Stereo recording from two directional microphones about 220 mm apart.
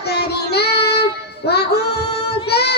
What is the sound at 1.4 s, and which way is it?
Music, 45° left (ahead or behind).